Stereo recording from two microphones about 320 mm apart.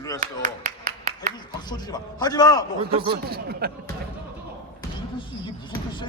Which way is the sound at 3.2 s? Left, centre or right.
Right.